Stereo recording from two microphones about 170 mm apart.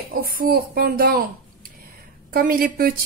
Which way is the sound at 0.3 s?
60° right (ahead or behind).